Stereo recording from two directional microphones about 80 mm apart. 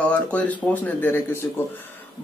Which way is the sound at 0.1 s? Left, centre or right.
Centre.